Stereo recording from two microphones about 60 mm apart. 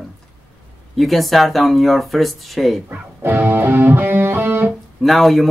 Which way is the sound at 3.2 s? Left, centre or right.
Right.